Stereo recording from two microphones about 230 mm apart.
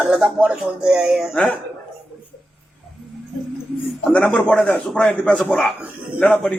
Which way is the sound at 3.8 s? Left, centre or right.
Centre.